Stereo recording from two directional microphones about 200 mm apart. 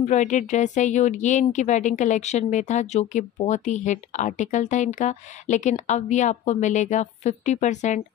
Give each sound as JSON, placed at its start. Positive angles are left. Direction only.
{"t": 0.0, "sound": "a woman's voice", "side_deg": 35}